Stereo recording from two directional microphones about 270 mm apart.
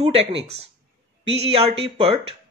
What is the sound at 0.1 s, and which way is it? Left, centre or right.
Speech, right.